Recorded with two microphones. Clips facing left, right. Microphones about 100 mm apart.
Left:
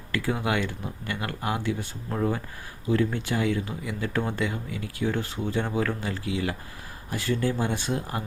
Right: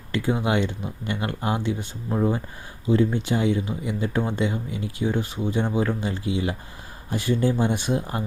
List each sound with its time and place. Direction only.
0.1 s speech: 20° right (ahead or behind)